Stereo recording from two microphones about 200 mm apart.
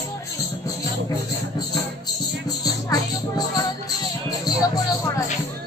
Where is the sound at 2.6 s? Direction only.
20° left (ahead or behind).